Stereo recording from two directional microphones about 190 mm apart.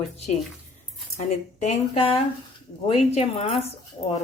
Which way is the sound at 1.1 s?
35° left (ahead or behind).